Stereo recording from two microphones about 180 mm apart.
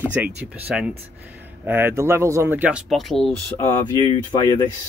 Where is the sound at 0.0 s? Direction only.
10° right (ahead or behind); by 3.7 s 10° left (ahead or behind).